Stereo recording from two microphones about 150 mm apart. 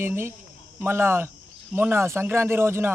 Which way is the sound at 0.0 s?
15° right (ahead or behind).